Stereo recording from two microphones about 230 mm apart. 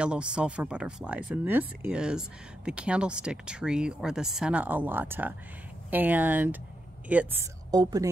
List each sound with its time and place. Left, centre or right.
0.0 s speech: centre